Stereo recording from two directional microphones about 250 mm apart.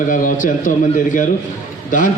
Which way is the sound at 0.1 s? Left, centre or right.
Left.